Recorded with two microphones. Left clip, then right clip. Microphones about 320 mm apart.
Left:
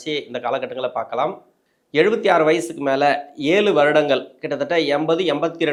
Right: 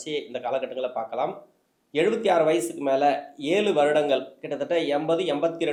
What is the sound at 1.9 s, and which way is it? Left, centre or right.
Speech, left.